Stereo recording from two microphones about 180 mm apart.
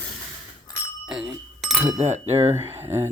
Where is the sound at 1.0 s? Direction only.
5° right (ahead or behind).